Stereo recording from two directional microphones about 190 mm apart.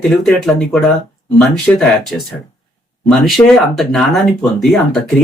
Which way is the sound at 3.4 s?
20° left (ahead or behind).